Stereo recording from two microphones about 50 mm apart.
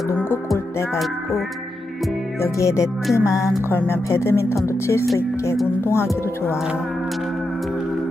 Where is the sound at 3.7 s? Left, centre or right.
Left.